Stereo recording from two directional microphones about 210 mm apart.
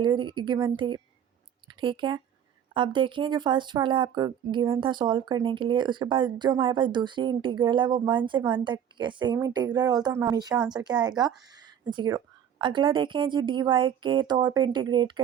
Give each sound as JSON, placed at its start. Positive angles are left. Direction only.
{"t": 0.0, "sound": "speech", "side_deg": -20}